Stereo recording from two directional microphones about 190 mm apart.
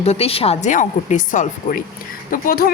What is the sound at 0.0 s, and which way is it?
Speech, 30° left (ahead or behind).